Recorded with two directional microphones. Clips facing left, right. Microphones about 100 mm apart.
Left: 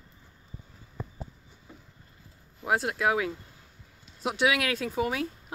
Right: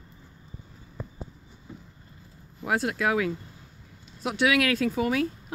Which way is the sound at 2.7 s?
20° left (ahead or behind).